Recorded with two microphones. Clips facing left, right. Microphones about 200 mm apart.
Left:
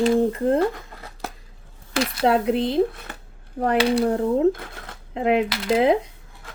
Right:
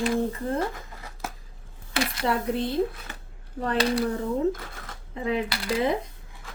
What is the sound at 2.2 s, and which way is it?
Speech, 90° left.